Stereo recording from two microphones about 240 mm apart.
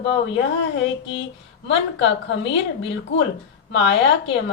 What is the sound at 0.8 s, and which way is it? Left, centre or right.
A woman's voice, left.